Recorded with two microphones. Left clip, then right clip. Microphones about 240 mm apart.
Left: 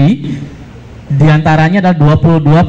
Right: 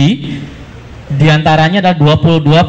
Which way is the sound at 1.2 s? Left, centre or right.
Left.